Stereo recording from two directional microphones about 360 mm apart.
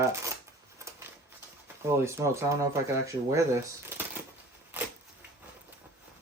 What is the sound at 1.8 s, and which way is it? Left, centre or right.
Speech, centre.